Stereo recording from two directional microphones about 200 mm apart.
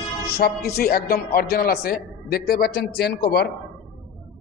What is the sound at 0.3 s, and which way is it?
A man's voice, 50° left (ahead or behind).